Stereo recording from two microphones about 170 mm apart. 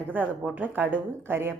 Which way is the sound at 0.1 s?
10° right (ahead or behind).